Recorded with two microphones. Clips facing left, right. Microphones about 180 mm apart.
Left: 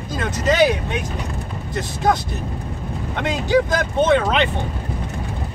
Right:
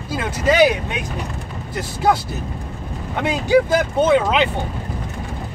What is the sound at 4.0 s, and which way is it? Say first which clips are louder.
Speech: even; 10° right (ahead or behind).